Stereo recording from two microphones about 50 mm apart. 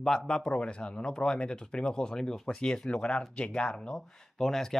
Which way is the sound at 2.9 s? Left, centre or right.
Left.